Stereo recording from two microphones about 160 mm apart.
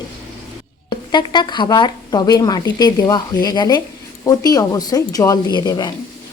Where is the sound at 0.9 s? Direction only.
30° left (ahead or behind).